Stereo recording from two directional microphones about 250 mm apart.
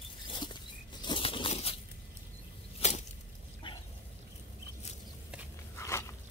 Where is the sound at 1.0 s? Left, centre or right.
Centre.